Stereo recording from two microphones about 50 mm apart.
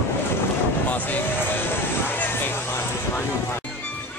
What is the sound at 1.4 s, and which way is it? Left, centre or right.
Vehicle, left.